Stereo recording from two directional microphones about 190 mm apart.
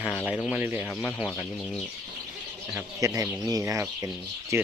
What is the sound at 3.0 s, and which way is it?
Speech, 15° right (ahead or behind).